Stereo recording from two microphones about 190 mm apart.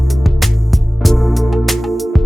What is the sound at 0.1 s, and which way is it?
Music, centre (ahead or behind).